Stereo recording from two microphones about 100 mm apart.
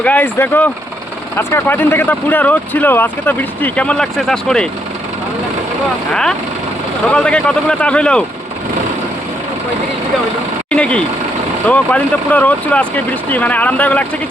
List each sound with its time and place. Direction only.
0.0 s speech: 20° left (ahead or behind)
7.1 s speech: 10° left (ahead or behind)
10.7 s speech: 10° left (ahead or behind)